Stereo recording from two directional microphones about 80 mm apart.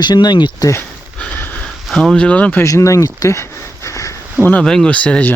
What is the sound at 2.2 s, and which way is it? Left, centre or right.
Speech, centre.